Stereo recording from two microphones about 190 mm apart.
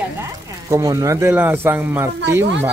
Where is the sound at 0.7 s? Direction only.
20° right (ahead or behind).